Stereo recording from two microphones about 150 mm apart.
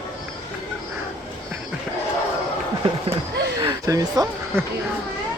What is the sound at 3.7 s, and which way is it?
Speech, 25° right (ahead or behind).